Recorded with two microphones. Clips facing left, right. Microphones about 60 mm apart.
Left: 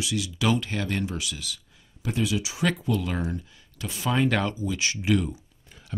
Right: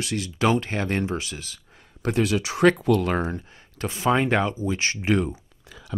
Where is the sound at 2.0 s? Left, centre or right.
Right.